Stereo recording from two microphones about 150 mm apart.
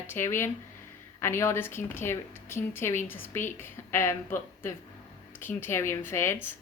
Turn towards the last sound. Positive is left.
turn(degrees=15)  # may be behind; listen again after turning